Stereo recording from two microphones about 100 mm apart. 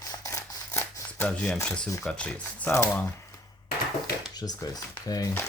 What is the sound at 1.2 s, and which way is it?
Speech, 5° left (ahead or behind).